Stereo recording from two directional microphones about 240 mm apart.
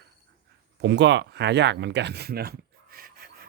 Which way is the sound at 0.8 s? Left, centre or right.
Right.